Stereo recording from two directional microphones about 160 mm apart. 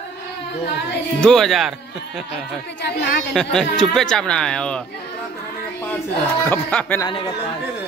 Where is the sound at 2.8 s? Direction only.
90° left.